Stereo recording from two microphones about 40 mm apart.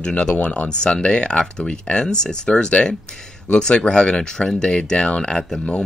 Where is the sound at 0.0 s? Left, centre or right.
Left.